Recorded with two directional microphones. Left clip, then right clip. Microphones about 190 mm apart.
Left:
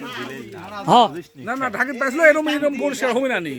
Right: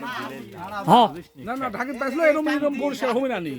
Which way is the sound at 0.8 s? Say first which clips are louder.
Left 2 dB; 30° right (ahead or behind).